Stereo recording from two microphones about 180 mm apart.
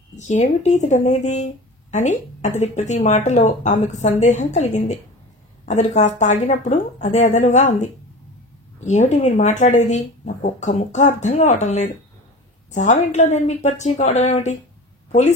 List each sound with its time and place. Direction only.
0.1 s a woman's voice: 40° left (ahead or behind)